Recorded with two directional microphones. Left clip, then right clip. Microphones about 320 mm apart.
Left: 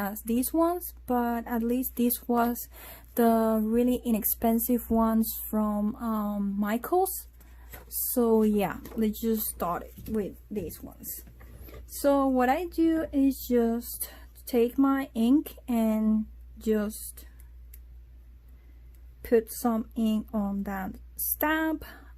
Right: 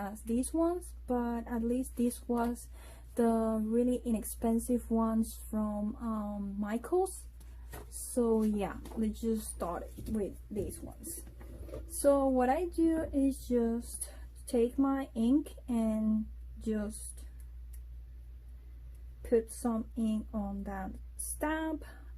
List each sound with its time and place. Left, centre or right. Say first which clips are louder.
0.0 s a woman's voice: left 6 dB; left
8.1 s a woman's voice: left 7 dB; left
12.0 s a woman's voice: left 4 dB; left
19.2 s a woman's voice: left 6 dB; left